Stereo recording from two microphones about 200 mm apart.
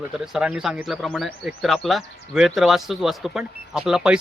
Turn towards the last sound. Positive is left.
turn(degrees=-5)  # may be behind; listen again after turning